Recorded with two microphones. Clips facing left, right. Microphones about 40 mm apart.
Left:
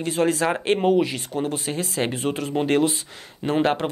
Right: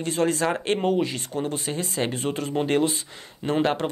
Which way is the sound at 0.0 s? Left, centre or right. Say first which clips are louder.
Left 2 dB; centre.